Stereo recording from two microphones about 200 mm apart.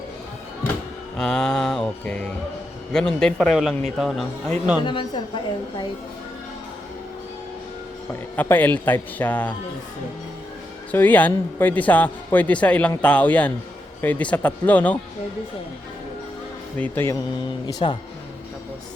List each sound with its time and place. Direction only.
1.1 s speech: 5° left (ahead or behind)
4.9 s a woman's voice: 25° left (ahead or behind)
8.4 s a man's voice: 10° left (ahead or behind)
10.9 s a man's voice: 10° left (ahead or behind)
16.7 s a man's voice: 10° left (ahead or behind)